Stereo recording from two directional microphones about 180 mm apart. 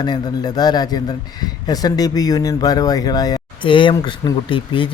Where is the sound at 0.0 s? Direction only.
20° left (ahead or behind).